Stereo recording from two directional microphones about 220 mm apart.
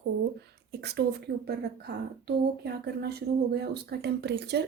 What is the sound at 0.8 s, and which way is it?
Speech, 50° right (ahead or behind).